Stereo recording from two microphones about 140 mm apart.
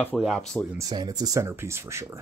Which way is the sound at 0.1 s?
5° left (ahead or behind).